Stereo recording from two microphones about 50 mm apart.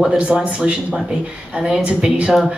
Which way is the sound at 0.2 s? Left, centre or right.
Right.